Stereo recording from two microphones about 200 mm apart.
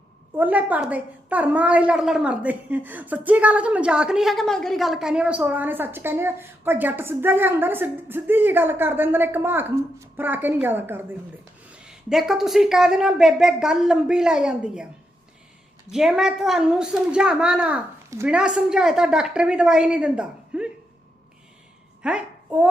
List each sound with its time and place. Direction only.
0.3 s a woman's voice: 10° right (ahead or behind)
15.9 s a woman's voice: centre (ahead or behind)
22.0 s a woman's voice: 5° right (ahead or behind)